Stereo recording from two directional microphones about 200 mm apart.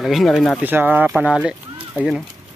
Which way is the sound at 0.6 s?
10° right (ahead or behind).